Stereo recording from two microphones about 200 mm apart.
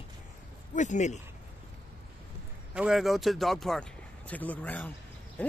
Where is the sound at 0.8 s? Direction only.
35° left (ahead or behind).